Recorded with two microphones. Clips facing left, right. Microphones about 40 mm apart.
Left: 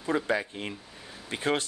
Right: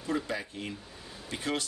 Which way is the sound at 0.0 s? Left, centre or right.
Left.